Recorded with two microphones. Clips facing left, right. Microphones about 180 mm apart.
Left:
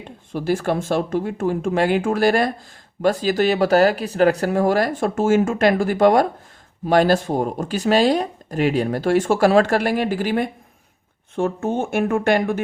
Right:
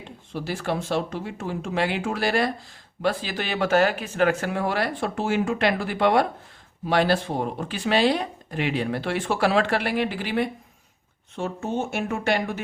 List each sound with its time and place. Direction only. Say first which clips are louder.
0.3 s speech: left 7 dB; 50° left (ahead or behind)